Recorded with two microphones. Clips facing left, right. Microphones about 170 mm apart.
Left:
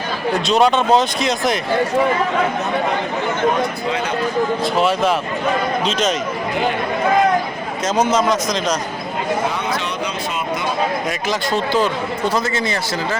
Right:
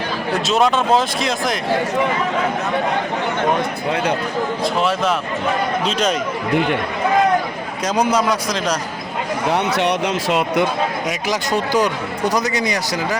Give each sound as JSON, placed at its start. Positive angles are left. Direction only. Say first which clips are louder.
{"t": 0.4, "sound": "speech", "louder": "left 2 dB", "side_deg": 0}
{"t": 4.6, "sound": "speech", "louder": "even", "side_deg": 0}
{"t": 9.5, "sound": "speech", "louder": "right 5 dB", "side_deg": -70}
{"t": 11.3, "sound": "speech", "louder": "even", "side_deg": -15}